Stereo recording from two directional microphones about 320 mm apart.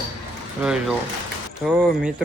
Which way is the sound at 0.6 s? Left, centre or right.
Centre.